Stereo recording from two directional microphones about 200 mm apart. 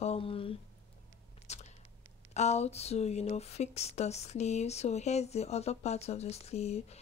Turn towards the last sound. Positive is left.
turn(degrees=30)  # may be behind; listen again after turning